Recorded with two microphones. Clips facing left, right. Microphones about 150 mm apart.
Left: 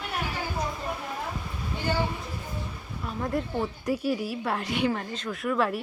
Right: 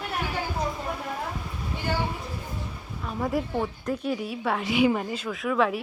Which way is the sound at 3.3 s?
Centre (ahead or behind).